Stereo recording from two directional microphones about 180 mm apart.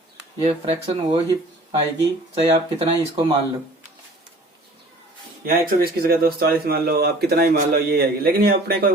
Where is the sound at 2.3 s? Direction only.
30° right (ahead or behind).